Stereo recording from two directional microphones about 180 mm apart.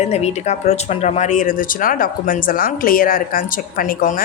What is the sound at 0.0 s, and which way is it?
Speech, 35° left (ahead or behind).